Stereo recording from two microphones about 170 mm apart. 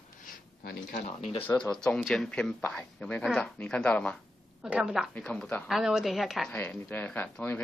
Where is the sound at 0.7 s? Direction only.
50° left (ahead or behind).